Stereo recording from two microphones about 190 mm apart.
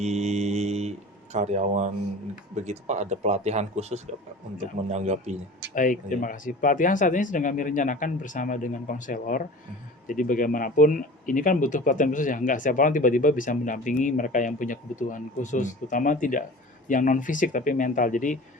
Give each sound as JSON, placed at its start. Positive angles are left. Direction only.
{"t": 0.0, "sound": "a sound", "side_deg": -35}
{"t": 2.6, "sound": "speech", "side_deg": -35}
{"t": 5.7, "sound": "speech", "side_deg": 45}